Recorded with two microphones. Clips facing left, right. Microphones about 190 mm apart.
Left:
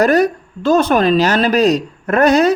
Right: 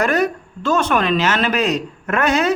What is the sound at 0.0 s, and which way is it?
Speech, 35° left (ahead or behind).